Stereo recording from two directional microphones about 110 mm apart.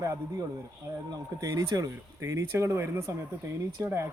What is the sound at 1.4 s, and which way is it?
Speech, 30° right (ahead or behind).